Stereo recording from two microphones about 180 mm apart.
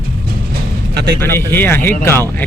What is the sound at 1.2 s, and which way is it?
Speech, 10° left (ahead or behind).